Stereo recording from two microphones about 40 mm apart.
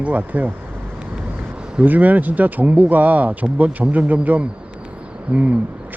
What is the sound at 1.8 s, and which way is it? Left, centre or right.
Speech, right.